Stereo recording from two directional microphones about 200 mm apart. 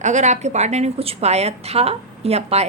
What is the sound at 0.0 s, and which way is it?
A woman's voice, 35° right (ahead or behind).